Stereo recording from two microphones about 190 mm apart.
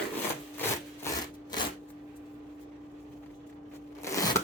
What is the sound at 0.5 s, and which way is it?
Wood, 10° left (ahead or behind).